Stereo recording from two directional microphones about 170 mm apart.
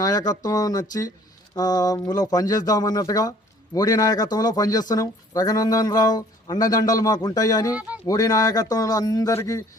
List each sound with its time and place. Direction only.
0.0 s speech: 20° left (ahead or behind)